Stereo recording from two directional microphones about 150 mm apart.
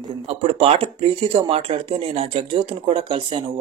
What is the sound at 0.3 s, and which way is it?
Speech, 40° right (ahead or behind).